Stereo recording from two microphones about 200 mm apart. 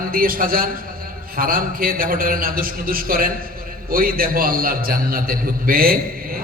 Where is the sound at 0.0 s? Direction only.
45° right (ahead or behind).